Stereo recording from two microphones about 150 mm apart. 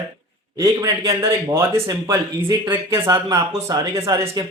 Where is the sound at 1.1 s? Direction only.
20° right (ahead or behind).